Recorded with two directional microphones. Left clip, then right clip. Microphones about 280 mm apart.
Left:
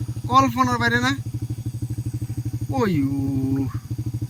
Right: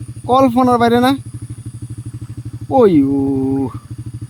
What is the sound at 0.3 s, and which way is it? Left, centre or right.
Speech, centre.